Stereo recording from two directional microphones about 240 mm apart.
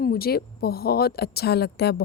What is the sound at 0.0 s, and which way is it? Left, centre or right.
Speech, left.